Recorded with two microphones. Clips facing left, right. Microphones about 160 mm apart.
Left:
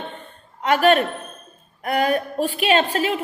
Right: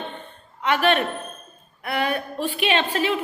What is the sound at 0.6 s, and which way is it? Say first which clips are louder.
A woman's voice: left 4 dB; 40° left (ahead or behind).